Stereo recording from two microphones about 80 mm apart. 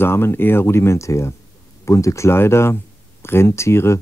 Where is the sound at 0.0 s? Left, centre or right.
Left.